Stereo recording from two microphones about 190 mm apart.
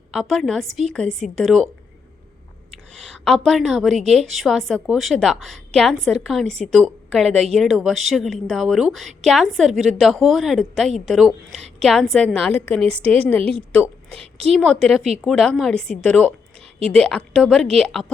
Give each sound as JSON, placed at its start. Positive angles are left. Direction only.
{"t": 0.1, "sound": "a woman's voice", "side_deg": 0}
{"t": 2.9, "sound": "a woman's voice", "side_deg": 5}
{"t": 14.2, "sound": "a woman's voice", "side_deg": -30}
{"t": 14.5, "sound": "a woman's voice", "side_deg": 0}